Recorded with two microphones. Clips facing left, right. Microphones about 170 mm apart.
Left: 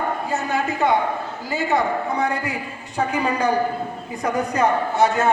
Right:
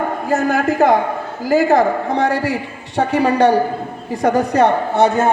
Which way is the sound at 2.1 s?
90° right.